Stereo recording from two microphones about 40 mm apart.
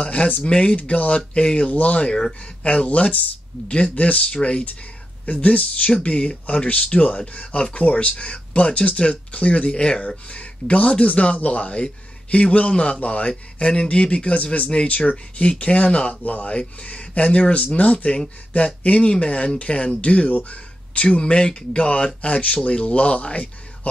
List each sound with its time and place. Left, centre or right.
0.0 s speech: left